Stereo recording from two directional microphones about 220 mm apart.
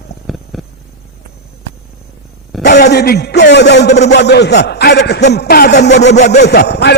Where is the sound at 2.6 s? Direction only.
50° left (ahead or behind).